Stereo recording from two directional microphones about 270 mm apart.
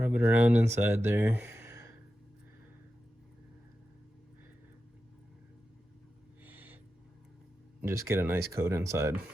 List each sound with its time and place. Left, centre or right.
0.0 s speech: centre
6.4 s owl: centre
7.8 s speech: centre